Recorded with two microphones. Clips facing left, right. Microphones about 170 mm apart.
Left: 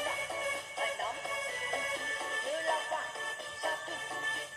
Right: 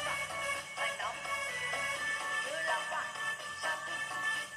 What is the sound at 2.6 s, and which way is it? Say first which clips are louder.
Music: left 4 dB; 25° left (ahead or behind).